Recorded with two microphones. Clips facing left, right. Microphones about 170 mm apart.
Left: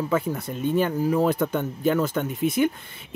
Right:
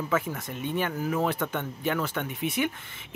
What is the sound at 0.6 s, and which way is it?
Speech, 35° left (ahead or behind).